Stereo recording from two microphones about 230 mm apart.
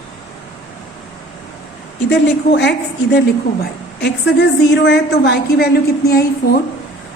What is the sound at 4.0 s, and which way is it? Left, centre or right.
A woman's voice, left.